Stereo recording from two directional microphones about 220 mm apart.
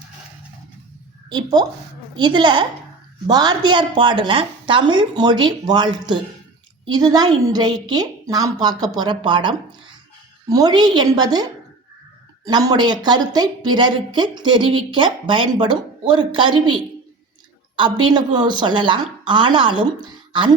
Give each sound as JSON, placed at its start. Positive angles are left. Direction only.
{"t": 1.3, "sound": "a woman's voice", "side_deg": -20}
{"t": 17.7, "sound": "a woman's voice", "side_deg": -20}